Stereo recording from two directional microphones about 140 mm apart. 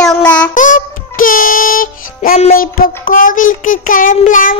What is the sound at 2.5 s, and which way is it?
Child singing, 85° left.